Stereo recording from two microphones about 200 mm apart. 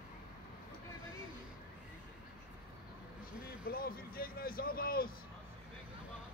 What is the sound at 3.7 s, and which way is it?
Speech, 45° left (ahead or behind).